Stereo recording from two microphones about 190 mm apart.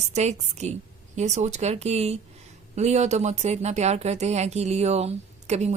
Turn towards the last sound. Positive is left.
turn(degrees=-35)  # may be behind; listen again after turning